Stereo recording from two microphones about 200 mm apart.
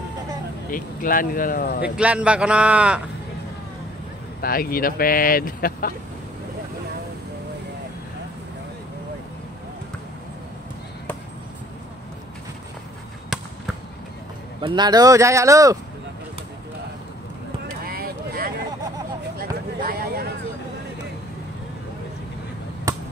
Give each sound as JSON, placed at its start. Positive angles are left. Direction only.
{"t": 0.7, "sound": "speech", "side_deg": 45}
{"t": 2.0, "sound": "a man's voice", "side_deg": -5}
{"t": 4.4, "sound": "speech", "side_deg": 45}
{"t": 14.6, "sound": "speech", "side_deg": -25}
{"t": 17.8, "sound": "a sound", "side_deg": -50}